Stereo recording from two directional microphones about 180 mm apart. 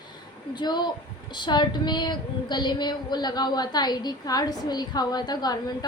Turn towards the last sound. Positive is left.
turn(degrees=25)  # may be behind; listen again after turning